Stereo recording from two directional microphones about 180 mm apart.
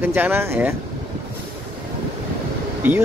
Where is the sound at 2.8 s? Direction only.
10° right (ahead or behind).